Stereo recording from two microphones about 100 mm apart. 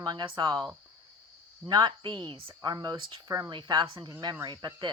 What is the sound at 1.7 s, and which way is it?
Speech, 50° right (ahead or behind).